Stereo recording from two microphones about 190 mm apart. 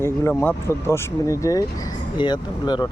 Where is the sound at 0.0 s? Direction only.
15° left (ahead or behind).